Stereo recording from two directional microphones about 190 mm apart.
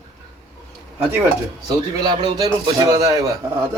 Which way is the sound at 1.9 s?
20° right (ahead or behind).